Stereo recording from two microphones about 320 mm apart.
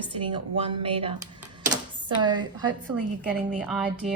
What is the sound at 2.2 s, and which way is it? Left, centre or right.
Speech, centre.